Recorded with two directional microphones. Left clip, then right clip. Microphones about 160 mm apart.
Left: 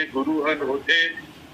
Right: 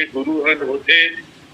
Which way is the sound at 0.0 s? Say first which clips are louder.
Right 5 dB; 25° right (ahead or behind).